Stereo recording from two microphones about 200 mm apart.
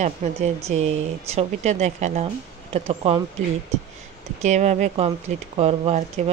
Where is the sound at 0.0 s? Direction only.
35° right (ahead or behind).